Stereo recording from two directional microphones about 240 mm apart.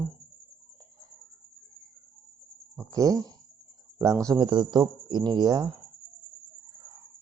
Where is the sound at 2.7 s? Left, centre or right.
Centre.